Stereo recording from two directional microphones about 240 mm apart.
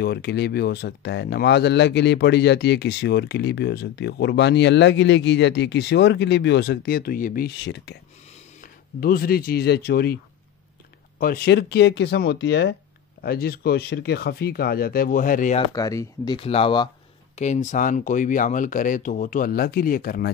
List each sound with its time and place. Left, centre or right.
0.0 s speech: left
11.1 s speech: left
15.7 s speech: centre; by 20.2 s left